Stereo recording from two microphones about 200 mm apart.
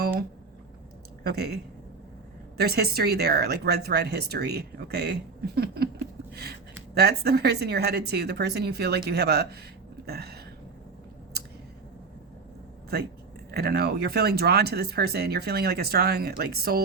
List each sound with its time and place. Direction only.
1.2 s speech: 50° right (ahead or behind)
2.6 s speech: 50° right (ahead or behind)
6.9 s speech: 55° right (ahead or behind)
13.5 s speech: 50° right (ahead or behind)